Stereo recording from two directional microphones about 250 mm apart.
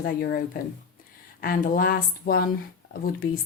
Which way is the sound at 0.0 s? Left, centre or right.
Left.